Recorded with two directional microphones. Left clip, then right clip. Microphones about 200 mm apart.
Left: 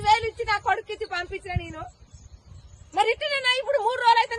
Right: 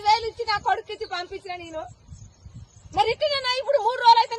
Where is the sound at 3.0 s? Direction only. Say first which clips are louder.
Right 1 dB; 40° left (ahead or behind).